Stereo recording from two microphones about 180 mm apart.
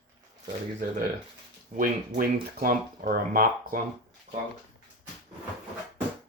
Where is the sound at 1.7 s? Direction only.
50° right (ahead or behind).